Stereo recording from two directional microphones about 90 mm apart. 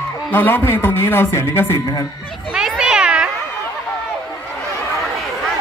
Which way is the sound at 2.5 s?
5° right (ahead or behind).